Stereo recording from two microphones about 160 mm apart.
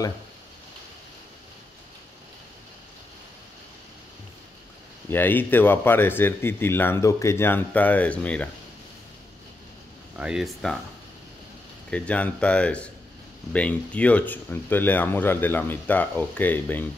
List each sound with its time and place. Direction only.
5.1 s speech: 10° left (ahead or behind)
10.1 s speech: 5° right (ahead or behind)
11.9 s speech: 10° left (ahead or behind)